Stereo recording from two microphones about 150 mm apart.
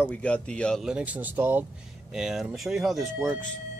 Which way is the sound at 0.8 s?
10° right (ahead or behind).